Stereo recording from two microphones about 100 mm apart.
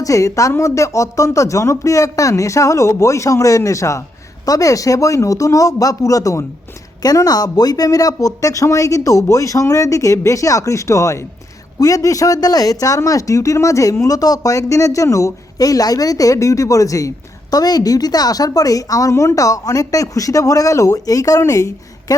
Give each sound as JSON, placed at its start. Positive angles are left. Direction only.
{"t": 0.0, "sound": "speech", "side_deg": 35}